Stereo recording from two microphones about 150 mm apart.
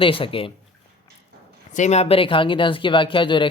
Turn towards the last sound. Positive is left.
turn(degrees=35)  # may be behind; listen again after turning